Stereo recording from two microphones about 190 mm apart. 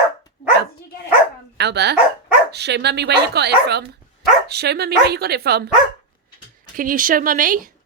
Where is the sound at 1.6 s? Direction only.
60° right (ahead or behind).